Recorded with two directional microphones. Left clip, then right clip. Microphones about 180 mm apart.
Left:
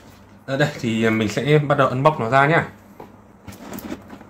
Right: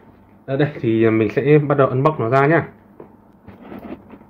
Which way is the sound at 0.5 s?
30° right (ahead or behind).